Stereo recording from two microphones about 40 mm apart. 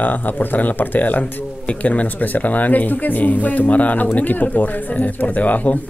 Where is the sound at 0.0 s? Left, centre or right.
Left.